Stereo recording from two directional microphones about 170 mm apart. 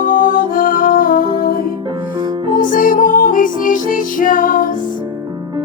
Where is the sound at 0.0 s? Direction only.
50° left (ahead or behind).